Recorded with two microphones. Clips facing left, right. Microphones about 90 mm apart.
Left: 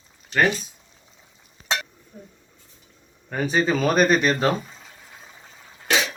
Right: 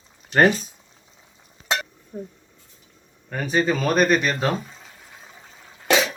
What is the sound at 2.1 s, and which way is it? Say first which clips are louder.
Speech: right 10 dB; 50° right (ahead or behind).